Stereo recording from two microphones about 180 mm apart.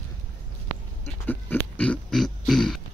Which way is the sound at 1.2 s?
10° left (ahead or behind).